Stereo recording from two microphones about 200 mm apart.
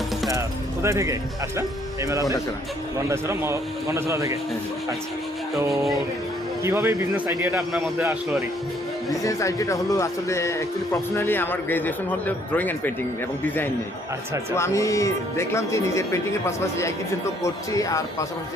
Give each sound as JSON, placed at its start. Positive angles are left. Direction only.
{"t": 0.3, "sound": "a man's voice", "side_deg": -15}
{"t": 5.5, "sound": "a man's voice", "side_deg": -15}
{"t": 7.5, "sound": "a man's voice", "side_deg": 0}
{"t": 9.0, "sound": "speech", "side_deg": 15}
{"t": 14.5, "sound": "speech", "side_deg": 15}